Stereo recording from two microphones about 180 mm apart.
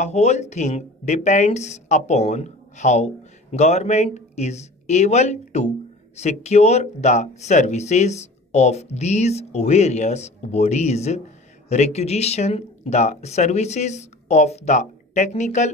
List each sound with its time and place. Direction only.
0.0 s speech: 40° left (ahead or behind)